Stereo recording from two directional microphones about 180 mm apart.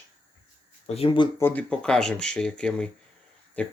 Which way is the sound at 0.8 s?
35° left (ahead or behind).